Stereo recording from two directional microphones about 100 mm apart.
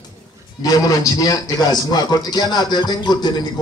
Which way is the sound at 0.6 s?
35° left (ahead or behind).